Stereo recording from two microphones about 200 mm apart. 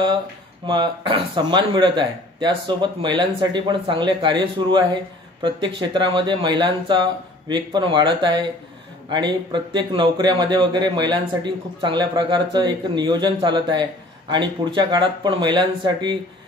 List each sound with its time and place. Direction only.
0.7 s speech: 25° right (ahead or behind)